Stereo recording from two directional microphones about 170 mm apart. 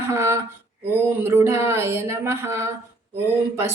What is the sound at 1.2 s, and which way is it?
A woman's voice, 15° right (ahead or behind).